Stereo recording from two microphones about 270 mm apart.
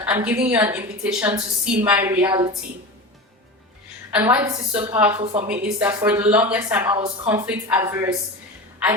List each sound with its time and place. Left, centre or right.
0.0 s a woman's voice: centre
4.1 s a woman's voice: centre
5.2 s a woman's voice: right
5.5 s a woman's voice: centre